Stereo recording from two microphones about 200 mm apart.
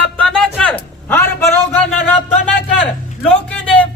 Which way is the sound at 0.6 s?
5° left (ahead or behind).